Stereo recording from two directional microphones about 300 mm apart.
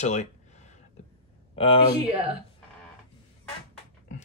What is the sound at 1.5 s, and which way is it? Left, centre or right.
Speech, centre.